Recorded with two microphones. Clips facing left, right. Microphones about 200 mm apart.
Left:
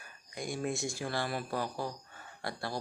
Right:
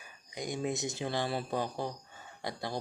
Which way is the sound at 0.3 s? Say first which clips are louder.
Right 1 dB; 20° right (ahead or behind).